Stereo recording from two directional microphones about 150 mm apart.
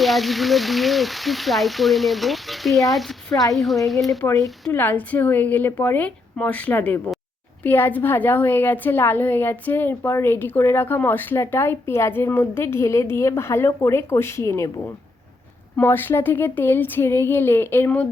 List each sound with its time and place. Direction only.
0.0 s speech: centre (ahead or behind)
4.2 s a woman's voice: 15° left (ahead or behind)
15.7 s a woman's voice: 15° left (ahead or behind)